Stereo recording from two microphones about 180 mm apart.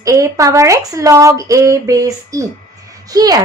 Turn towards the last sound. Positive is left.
turn(degrees=-20)  # may be behind; listen again after turning